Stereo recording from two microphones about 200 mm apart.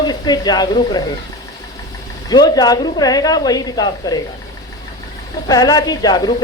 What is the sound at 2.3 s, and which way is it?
A woman's voice, 20° left (ahead or behind).